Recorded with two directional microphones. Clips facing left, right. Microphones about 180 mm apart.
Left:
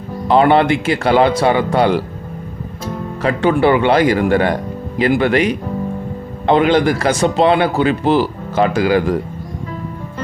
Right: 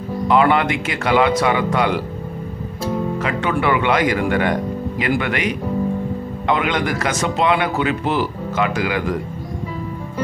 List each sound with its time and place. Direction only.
0.3 s speech: 30° left (ahead or behind)
3.2 s speech: 30° left (ahead or behind)